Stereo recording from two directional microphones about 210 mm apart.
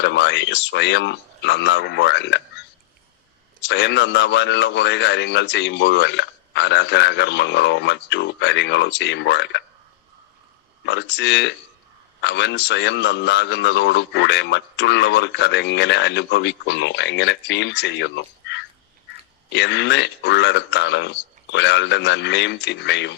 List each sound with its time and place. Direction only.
0.0 s speech: 55° left (ahead or behind)
3.7 s speech: 55° left (ahead or behind)
10.8 s speech: 55° left (ahead or behind)
19.5 s speech: 55° left (ahead or behind)